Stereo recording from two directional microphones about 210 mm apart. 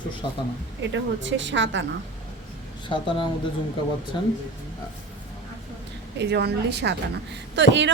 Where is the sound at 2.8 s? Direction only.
25° left (ahead or behind).